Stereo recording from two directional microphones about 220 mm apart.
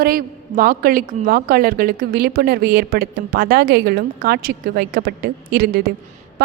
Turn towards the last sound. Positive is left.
turn(degrees=-45)  # may be behind; listen again after turning